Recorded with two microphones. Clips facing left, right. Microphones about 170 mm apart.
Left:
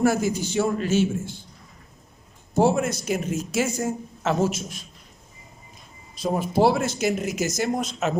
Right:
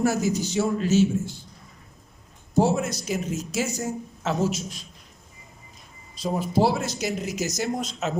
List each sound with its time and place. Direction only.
0.0 s speech: 55° left (ahead or behind)
2.6 s speech: 55° left (ahead or behind)
6.1 s speech: 55° left (ahead or behind)